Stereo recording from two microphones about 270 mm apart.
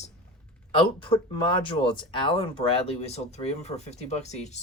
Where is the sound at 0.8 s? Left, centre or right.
Centre.